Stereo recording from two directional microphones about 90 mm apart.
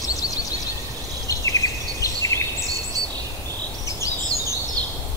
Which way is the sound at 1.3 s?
35° left (ahead or behind).